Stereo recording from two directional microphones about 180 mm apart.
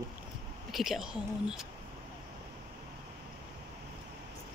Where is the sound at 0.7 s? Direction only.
Centre (ahead or behind).